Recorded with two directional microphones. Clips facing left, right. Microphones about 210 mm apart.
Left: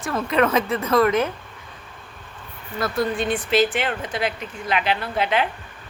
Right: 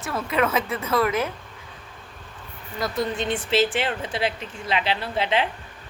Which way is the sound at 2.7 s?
15° right (ahead or behind).